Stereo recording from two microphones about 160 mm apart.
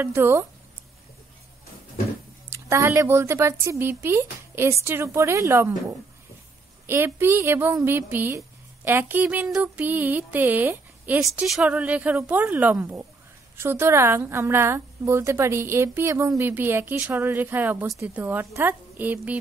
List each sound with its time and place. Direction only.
0.0 s a woman's voice: 15° right (ahead or behind)
2.5 s a woman's voice: 20° right (ahead or behind)